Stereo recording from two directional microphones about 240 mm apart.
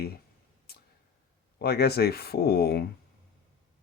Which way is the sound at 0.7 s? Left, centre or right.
Left.